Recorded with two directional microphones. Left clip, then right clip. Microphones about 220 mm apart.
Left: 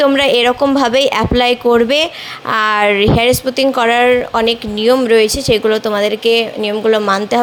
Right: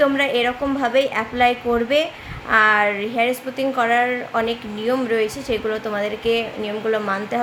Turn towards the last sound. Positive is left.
turn(degrees=35)  # may be behind; listen again after turning